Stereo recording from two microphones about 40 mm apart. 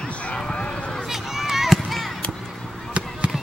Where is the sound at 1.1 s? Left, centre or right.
Centre.